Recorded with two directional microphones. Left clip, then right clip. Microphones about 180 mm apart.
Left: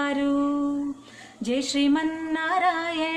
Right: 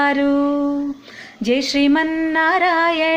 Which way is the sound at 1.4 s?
25° right (ahead or behind).